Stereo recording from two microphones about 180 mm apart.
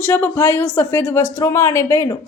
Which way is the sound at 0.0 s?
10° left (ahead or behind).